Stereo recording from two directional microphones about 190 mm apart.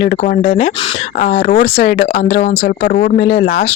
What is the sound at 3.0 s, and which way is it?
Speech, 45° left (ahead or behind).